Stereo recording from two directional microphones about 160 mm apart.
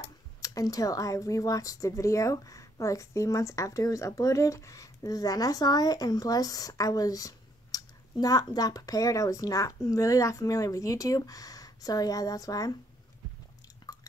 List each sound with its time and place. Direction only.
0.4 s speech: 20° left (ahead or behind)
13.9 s drip: 25° left (ahead or behind)